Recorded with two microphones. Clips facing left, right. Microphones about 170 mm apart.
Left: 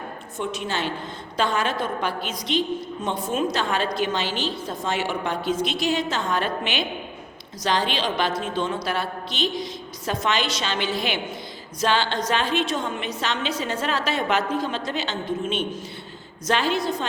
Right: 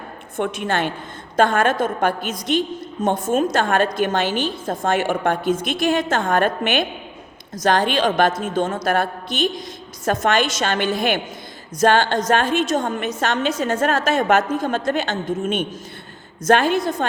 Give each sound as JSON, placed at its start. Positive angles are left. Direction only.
{"t": 0.3, "sound": "a woman's voice", "side_deg": -55}